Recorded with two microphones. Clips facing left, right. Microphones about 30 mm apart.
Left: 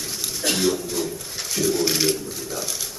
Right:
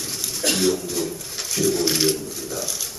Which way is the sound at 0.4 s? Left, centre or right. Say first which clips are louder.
Right 1 dB; centre.